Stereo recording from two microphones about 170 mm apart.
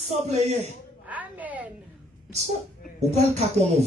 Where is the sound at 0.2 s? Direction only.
40° right (ahead or behind).